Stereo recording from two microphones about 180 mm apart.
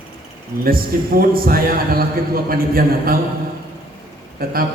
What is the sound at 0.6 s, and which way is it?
A man's voice, 55° right (ahead or behind).